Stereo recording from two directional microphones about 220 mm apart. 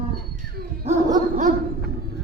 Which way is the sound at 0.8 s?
35° right (ahead or behind).